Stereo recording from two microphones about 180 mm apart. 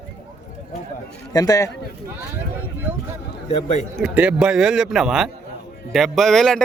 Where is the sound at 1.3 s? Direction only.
20° left (ahead or behind).